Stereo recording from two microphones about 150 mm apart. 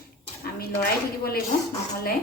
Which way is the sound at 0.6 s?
90° left.